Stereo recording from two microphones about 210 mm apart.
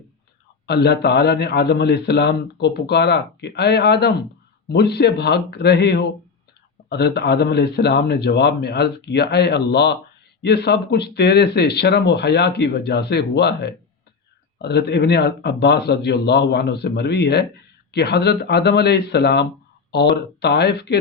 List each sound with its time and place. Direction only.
0.7 s a man's voice: 50° left (ahead or behind)